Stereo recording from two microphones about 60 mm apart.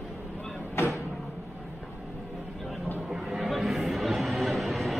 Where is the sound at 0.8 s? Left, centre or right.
Left.